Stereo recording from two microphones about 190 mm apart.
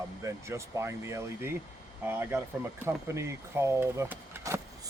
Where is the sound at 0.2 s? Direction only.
15° right (ahead or behind).